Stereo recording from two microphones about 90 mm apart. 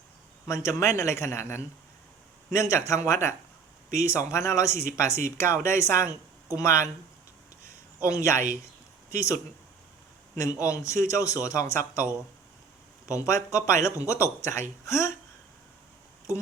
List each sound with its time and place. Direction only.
0.4 s a man's voice: 30° left (ahead or behind)
4.0 s speech: 30° left (ahead or behind)
8.0 s speech: 35° left (ahead or behind)
10.3 s speech: 35° left (ahead or behind)
13.1 s speech: 35° left (ahead or behind)